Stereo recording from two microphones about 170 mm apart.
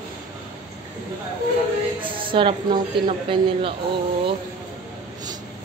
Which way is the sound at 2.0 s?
30° right (ahead or behind).